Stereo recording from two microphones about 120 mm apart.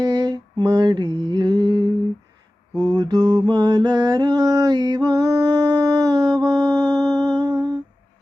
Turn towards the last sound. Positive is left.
turn(degrees=-30)  # may be behind; listen again after turning